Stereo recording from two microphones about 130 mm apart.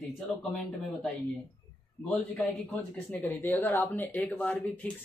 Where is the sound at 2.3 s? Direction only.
15° left (ahead or behind).